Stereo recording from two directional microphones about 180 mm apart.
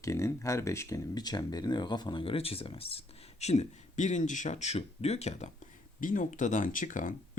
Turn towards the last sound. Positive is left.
turn(degrees=45)  # may be behind; listen again after turning